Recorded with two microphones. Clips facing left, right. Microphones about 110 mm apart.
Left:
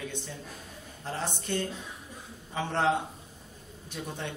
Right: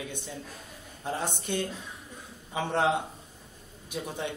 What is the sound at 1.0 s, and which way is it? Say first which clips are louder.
A man's voice: right 2 dB; 15° right (ahead or behind).